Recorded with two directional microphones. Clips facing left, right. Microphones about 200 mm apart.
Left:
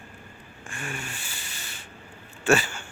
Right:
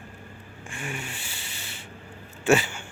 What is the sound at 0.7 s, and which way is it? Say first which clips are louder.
Vehicle: right 1 dB; 20° right (ahead or behind).